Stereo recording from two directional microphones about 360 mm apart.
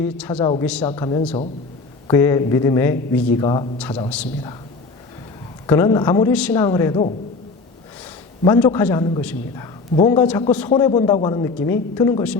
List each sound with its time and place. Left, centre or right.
0.0 s a man's voice: centre
5.6 s a man's voice: centre
8.4 s a man's voice: centre